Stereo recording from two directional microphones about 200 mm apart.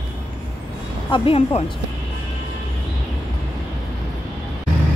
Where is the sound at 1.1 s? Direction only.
25° left (ahead or behind).